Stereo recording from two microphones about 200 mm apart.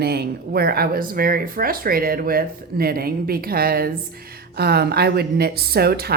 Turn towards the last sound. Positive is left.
turn(degrees=-50)  # may be behind; listen again after turning